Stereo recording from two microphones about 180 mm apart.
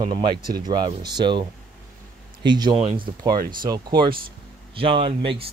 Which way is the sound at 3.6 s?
25° right (ahead or behind).